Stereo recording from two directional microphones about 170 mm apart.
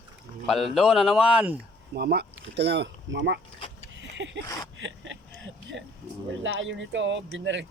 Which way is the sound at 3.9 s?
90° right.